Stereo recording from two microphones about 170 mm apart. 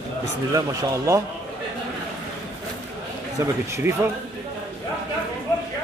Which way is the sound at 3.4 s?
15° right (ahead or behind).